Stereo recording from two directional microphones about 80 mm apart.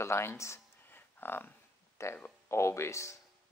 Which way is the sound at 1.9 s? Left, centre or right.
Left.